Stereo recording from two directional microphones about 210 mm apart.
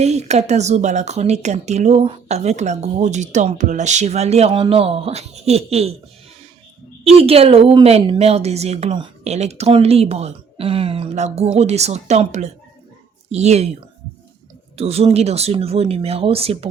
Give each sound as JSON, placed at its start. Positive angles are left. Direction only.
{"t": 0.0, "sound": "speech", "side_deg": -30}
{"t": 7.0, "sound": "a woman's voice", "side_deg": -30}
{"t": 14.8, "sound": "a woman's voice", "side_deg": -30}